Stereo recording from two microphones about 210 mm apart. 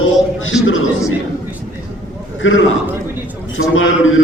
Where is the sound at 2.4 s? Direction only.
70° left (ahead or behind).